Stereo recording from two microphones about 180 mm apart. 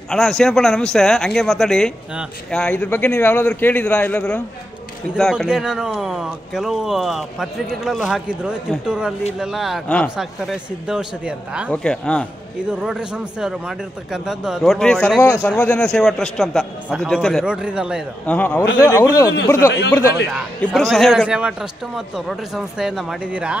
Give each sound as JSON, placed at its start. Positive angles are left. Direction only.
{"t": 0.1, "sound": "speech", "side_deg": 0}
{"t": 10.1, "sound": "speech", "side_deg": -5}
{"t": 11.7, "sound": "speech", "side_deg": 5}
{"t": 18.2, "sound": "a man's voice", "side_deg": 10}
{"t": 20.6, "sound": "speech", "side_deg": 0}